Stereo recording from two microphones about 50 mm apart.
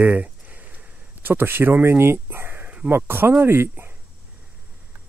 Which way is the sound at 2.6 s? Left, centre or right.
Right.